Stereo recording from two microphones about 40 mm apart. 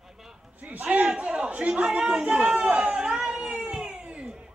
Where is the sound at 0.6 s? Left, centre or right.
Right.